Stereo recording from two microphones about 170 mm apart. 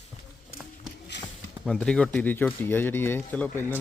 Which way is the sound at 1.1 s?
90° left.